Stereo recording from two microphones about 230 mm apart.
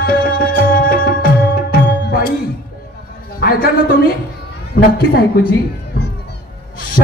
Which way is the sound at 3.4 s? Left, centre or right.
Left.